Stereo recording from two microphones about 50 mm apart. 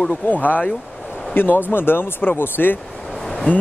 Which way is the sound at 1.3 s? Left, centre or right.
Left.